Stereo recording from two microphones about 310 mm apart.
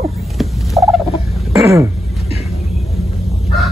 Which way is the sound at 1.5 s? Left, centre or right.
Centre.